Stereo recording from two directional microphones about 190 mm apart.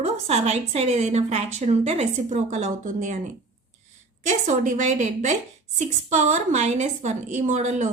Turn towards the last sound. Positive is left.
turn(degrees=-40)  # may be behind; listen again after turning